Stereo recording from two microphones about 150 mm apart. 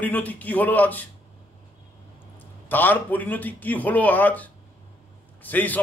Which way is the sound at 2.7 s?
10° left (ahead or behind).